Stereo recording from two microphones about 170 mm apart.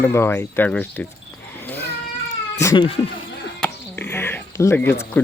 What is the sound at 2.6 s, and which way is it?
Speech, 25° left (ahead or behind).